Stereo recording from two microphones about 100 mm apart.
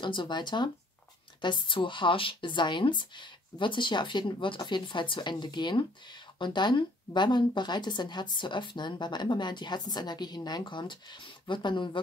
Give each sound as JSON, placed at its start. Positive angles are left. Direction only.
{"t": 0.0, "sound": "speech", "side_deg": 50}